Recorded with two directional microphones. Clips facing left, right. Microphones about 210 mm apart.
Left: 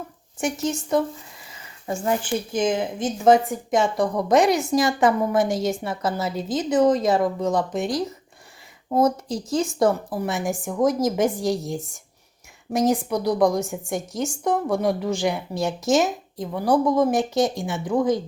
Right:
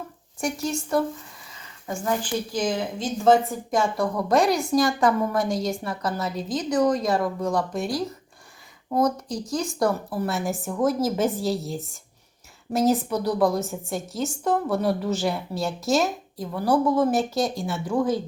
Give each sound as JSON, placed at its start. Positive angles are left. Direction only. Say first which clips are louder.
{"t": 0.6, "sound": "a woman's voice", "louder": "left 2 dB", "side_deg": 20}